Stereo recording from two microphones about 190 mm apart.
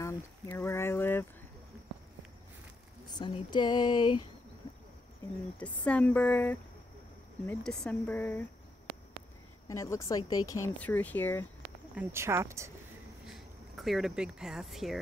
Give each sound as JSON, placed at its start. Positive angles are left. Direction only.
{"t": 0.0, "sound": "a sound", "side_deg": 15}
{"t": 3.1, "sound": "speech", "side_deg": 25}
{"t": 4.6, "sound": "a sound", "side_deg": 20}
{"t": 5.6, "sound": "speech", "side_deg": 5}
{"t": 9.7, "sound": "speech", "side_deg": 15}
{"t": 11.9, "sound": "speech", "side_deg": -10}
{"t": 13.7, "sound": "speech", "side_deg": 0}